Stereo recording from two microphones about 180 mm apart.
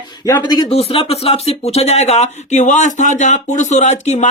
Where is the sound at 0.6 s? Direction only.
35° left (ahead or behind).